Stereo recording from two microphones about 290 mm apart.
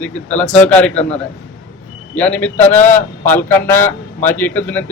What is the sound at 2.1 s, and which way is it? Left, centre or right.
A man's voice, centre.